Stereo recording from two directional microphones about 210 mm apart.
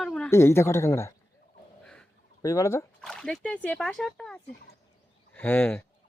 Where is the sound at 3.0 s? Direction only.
Centre (ahead or behind).